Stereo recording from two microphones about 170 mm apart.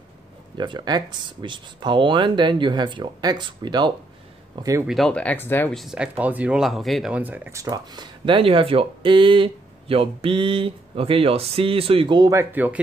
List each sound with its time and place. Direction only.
0.6 s speech: 25° right (ahead or behind)
4.8 s speech: centre (ahead or behind)
5.8 s speech: 5° right (ahead or behind)